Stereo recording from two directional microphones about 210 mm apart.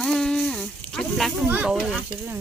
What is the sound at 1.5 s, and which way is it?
Snake, 5° right (ahead or behind).